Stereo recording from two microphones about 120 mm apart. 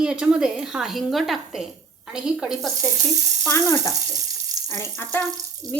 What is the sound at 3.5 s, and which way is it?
A woman's voice, 25° left (ahead or behind).